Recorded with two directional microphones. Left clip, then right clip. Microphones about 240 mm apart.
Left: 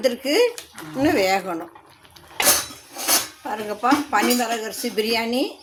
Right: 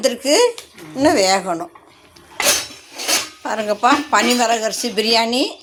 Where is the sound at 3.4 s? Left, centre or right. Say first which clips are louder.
Right 8 dB; centre.